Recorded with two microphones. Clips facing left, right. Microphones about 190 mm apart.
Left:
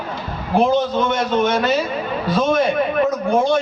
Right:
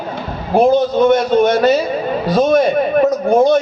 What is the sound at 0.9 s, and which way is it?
Speech, 35° right (ahead or behind).